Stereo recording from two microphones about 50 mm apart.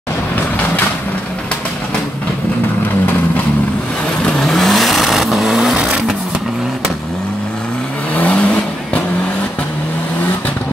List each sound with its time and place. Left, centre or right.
4.2 s vehicle: centre
4.5 s vehicle: centre
8.2 s vehicle: left